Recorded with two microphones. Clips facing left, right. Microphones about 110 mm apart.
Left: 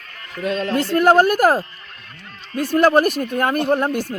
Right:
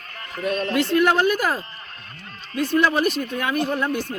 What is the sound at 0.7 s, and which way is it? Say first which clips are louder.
Speech: left 4 dB; 40° left (ahead or behind).